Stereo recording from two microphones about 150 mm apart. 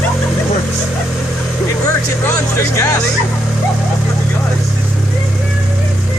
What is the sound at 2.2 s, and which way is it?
Speech, 20° left (ahead or behind).